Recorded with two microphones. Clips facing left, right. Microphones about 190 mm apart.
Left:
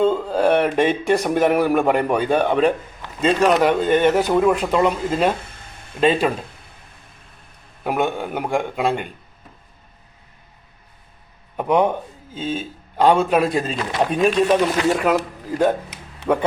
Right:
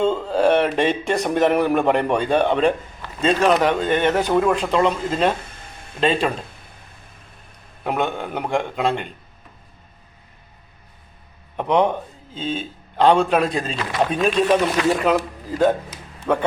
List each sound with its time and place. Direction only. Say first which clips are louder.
0.0 s a man's voice: left 1 dB; 5° left (ahead or behind)
7.9 s speech: left 2 dB; 5° left (ahead or behind)
11.5 s a man's voice: left 1 dB; 5° left (ahead or behind)
16.2 s speech: left 1 dB; 70° left (ahead or behind)